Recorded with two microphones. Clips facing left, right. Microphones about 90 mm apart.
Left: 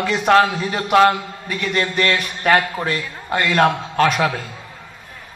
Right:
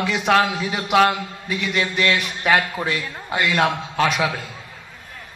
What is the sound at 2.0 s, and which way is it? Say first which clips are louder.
Speech: left 1 dB; 45° left (ahead or behind).